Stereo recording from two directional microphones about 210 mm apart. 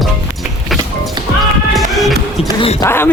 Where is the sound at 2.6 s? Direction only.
25° left (ahead or behind).